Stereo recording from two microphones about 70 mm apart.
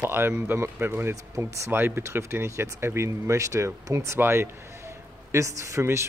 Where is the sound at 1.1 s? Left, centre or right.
Right.